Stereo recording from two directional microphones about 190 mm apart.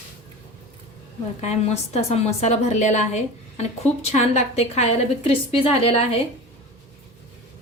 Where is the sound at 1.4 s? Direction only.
35° left (ahead or behind).